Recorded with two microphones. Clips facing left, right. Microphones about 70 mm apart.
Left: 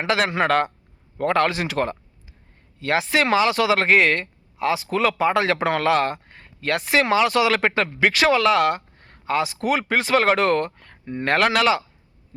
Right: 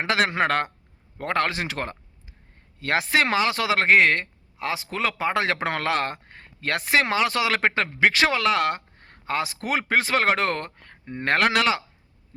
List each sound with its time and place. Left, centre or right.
0.0 s speech: right